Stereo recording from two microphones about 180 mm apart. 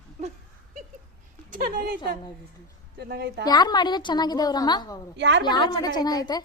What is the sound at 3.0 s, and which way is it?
Speech, 65° right (ahead or behind).